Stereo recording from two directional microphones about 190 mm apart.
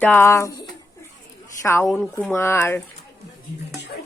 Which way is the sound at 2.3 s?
10° left (ahead or behind).